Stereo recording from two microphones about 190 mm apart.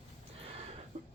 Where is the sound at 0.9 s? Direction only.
35° right (ahead or behind).